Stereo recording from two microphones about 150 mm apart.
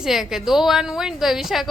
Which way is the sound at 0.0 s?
Centre (ahead or behind).